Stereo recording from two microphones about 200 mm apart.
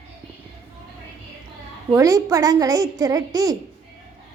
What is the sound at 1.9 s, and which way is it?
A woman's voice, 15° right (ahead or behind).